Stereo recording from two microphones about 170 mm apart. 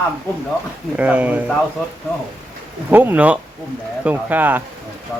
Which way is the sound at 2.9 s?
10° right (ahead or behind).